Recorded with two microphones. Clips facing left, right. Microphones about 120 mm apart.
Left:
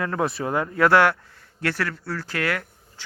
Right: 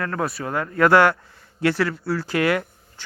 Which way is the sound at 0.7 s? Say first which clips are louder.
Right 2 dB; centre (ahead or behind).